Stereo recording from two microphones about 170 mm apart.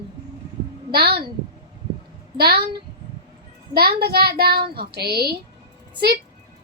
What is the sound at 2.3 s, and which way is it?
Speech, 70° right (ahead or behind).